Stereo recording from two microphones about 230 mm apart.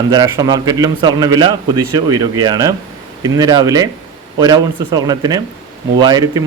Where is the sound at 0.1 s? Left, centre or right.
Centre.